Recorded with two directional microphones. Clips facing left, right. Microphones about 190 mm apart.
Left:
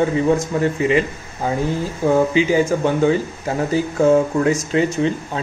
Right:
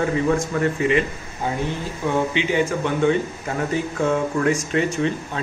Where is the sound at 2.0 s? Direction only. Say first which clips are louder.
Left 6 dB; 40° left (ahead or behind).